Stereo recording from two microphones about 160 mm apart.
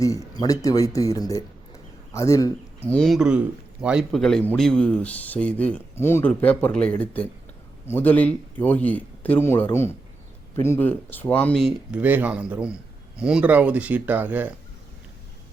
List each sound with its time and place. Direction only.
0.0 s speech: 20° left (ahead or behind)
2.9 s a man's voice: centre (ahead or behind)
11.6 s speech: 10° right (ahead or behind)